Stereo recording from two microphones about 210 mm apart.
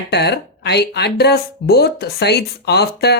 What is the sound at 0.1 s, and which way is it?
Speech, 55° left (ahead or behind).